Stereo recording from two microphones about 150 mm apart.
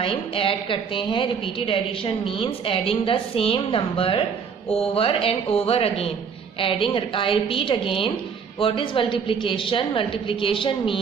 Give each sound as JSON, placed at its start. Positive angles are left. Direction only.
{"t": 0.0, "sound": "a woman's voice", "side_deg": 35}